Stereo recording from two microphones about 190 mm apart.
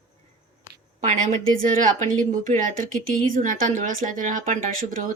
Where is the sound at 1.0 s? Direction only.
40° right (ahead or behind).